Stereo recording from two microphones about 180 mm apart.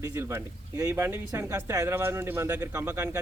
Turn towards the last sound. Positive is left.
turn(degrees=-15)  # may be behind; listen again after turning